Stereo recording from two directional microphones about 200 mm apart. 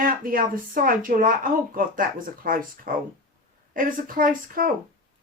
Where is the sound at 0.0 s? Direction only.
45° right (ahead or behind).